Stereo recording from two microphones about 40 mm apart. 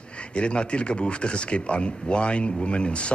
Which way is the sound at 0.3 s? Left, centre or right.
Left.